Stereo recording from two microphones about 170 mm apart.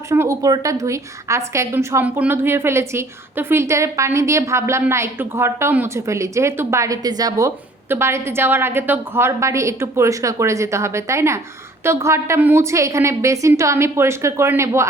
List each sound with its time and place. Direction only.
0.1 s a woman's voice: 20° right (ahead or behind)